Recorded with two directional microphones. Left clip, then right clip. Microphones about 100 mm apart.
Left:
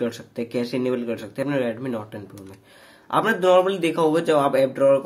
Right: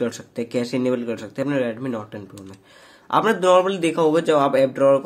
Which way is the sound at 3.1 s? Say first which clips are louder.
Right 1 dB; 30° right (ahead or behind).